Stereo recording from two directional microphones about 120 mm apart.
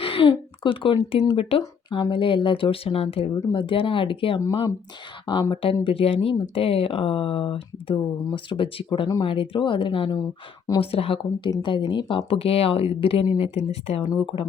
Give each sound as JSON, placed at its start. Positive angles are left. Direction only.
{"t": 0.0, "sound": "speech", "side_deg": 50}
{"t": 5.8, "sound": "speech", "side_deg": 50}
{"t": 14.1, "sound": "speech", "side_deg": 40}